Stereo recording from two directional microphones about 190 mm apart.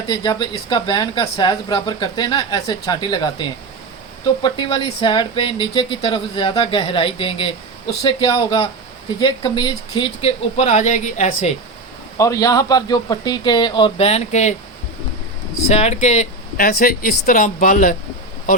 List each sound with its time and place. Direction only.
0.1 s speech: 20° left (ahead or behind); by 11.5 s 35° left (ahead or behind)
12.1 s speech: 15° left (ahead or behind); by 14.5 s 35° left (ahead or behind)
15.7 s speech: 35° left (ahead or behind)